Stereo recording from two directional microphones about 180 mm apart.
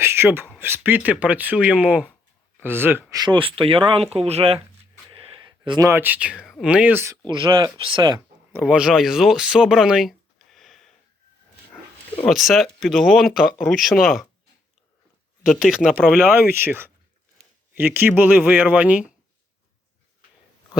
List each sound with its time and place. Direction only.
0.0 s a sound: 15° right (ahead or behind)
0.6 s speech: 10° right (ahead or behind)
3.1 s speech: 25° right (ahead or behind)
5.0 s a sound: 30° right (ahead or behind)
5.9 s speech: 10° right (ahead or behind)
7.3 s speech: 25° right (ahead or behind)
8.5 s speech: 5° right (ahead or behind)
12.2 s speech: centre (ahead or behind)
15.4 s speech: 5° right (ahead or behind)
16.2 s speech: 10° right (ahead or behind)